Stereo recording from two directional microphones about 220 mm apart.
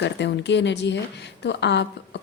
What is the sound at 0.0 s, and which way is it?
Speech, 55° left (ahead or behind).